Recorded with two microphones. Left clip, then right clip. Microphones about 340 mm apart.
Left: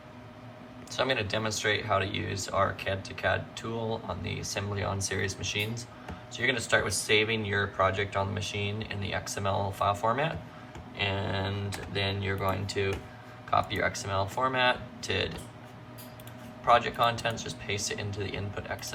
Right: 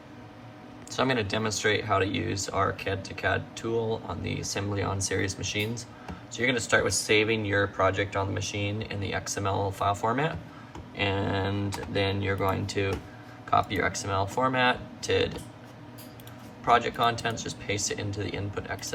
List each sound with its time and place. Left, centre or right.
0.9 s speech: centre
16.6 s speech: centre